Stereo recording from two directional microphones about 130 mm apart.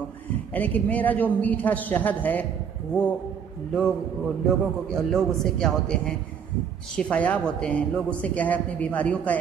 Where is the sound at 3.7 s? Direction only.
5° left (ahead or behind).